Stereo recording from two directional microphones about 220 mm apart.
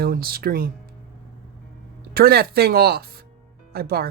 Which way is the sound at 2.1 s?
45° right (ahead or behind).